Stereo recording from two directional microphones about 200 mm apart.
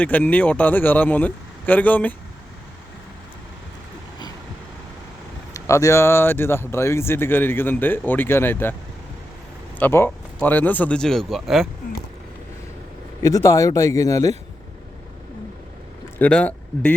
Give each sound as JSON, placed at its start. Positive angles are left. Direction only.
{"t": 0.0, "sound": "speech", "side_deg": 5}
{"t": 5.5, "sound": "speech", "side_deg": 15}
{"t": 9.7, "sound": "speech", "side_deg": 10}
{"t": 13.2, "sound": "speech", "side_deg": 15}
{"t": 16.1, "sound": "speech", "side_deg": 5}